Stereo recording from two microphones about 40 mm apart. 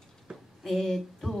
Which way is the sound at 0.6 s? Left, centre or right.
Centre.